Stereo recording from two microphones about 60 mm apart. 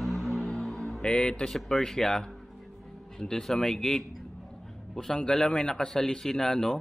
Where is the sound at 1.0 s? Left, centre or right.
Centre.